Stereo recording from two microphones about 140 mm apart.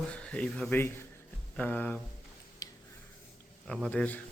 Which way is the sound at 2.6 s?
25° left (ahead or behind).